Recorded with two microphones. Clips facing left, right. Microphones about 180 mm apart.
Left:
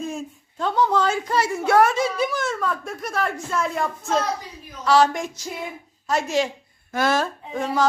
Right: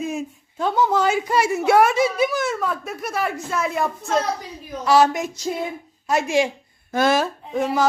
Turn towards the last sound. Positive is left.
turn(degrees=-5)  # may be behind; listen again after turning